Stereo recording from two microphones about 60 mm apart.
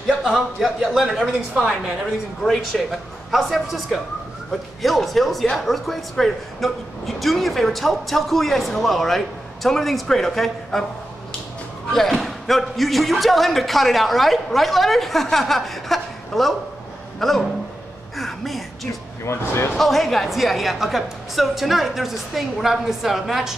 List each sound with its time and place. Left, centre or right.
0.2 s speech: centre
11.9 s speech: centre
18.1 s a sound: centre
19.2 s speech: left
19.8 s speech: centre